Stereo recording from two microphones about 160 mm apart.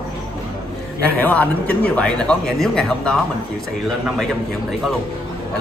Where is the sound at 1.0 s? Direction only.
10° left (ahead or behind).